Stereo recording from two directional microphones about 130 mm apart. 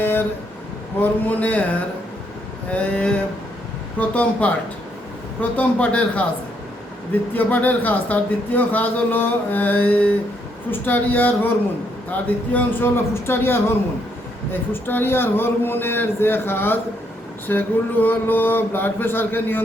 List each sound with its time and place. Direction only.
0.0 s vehicle: 15° left (ahead or behind)
1.3 s a man's voice: 10° left (ahead or behind)
2.7 s a man's voice: 10° left (ahead or behind)
7.3 s a man's voice: 15° left (ahead or behind)